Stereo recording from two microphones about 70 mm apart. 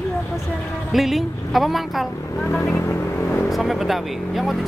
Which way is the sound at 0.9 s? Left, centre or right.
Centre.